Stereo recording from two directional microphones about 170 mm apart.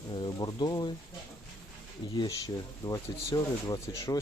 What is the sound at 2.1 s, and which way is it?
Speech, 25° left (ahead or behind).